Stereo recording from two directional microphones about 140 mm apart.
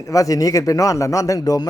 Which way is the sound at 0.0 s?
25° left (ahead or behind).